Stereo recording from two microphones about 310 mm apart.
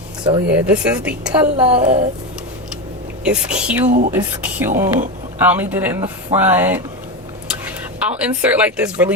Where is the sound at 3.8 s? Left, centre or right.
Right.